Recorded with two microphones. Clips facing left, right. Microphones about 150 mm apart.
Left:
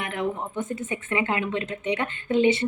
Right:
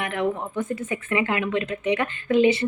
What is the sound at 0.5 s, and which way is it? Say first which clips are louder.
Speech: right 2 dB; 25° left (ahead or behind).